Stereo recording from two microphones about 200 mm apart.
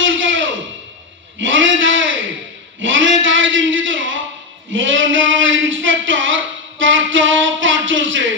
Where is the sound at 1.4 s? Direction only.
75° right (ahead or behind).